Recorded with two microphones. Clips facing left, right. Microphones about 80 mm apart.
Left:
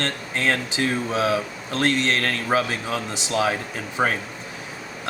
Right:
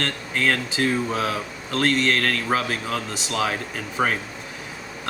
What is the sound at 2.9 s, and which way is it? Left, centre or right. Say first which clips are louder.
Speech: left 4 dB; left.